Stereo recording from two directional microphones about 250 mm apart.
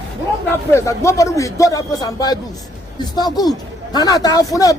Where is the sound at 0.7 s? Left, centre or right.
Centre.